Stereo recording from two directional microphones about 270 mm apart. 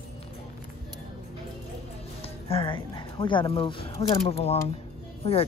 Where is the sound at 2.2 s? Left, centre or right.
Left.